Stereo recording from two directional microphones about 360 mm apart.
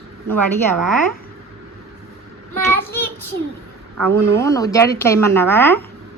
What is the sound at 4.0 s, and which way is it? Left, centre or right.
Speech, centre.